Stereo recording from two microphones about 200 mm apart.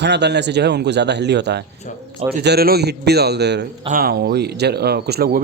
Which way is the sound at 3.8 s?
45° right (ahead or behind).